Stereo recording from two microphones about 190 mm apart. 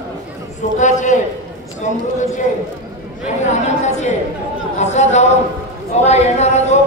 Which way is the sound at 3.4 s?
40° left (ahead or behind).